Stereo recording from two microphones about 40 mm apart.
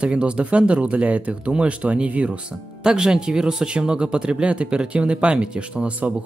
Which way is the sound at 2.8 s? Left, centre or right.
Centre.